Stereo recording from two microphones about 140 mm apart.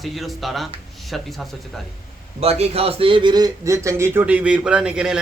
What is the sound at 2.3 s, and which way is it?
A man's voice, 45° right (ahead or behind).